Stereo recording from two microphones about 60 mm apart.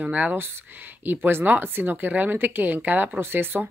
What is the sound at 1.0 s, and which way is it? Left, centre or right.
Speech, right.